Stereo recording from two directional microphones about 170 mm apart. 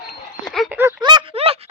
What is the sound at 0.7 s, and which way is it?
Speech, 15° right (ahead or behind).